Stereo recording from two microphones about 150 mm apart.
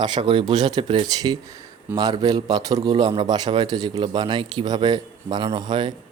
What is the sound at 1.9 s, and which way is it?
Speech, 15° right (ahead or behind).